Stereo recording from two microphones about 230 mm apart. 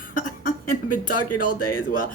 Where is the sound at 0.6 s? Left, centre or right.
Left.